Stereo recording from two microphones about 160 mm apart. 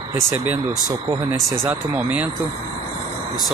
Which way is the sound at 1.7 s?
10° right (ahead or behind).